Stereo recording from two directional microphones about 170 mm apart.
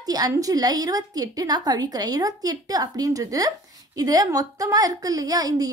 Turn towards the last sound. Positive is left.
turn(degrees=-20)  # may be behind; listen again after turning